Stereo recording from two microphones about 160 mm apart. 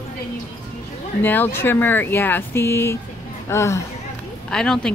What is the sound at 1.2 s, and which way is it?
Speech, 10° left (ahead or behind).